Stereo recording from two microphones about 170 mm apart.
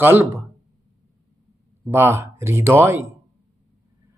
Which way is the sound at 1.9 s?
15° right (ahead or behind).